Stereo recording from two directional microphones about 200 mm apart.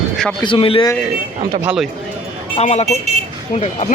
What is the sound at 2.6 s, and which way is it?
Speech, 35° left (ahead or behind).